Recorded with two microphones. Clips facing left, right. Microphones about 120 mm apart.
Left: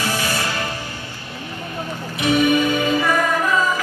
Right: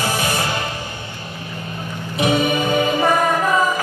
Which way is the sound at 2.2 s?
25° right (ahead or behind).